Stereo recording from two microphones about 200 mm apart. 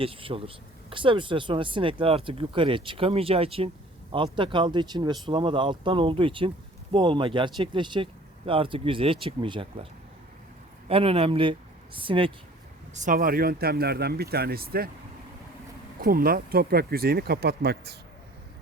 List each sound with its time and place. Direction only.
0.0 s speech: 25° right (ahead or behind)
10.8 s speech: 30° right (ahead or behind)
12.9 s speech: 40° right (ahead or behind)
16.0 s speech: 45° right (ahead or behind)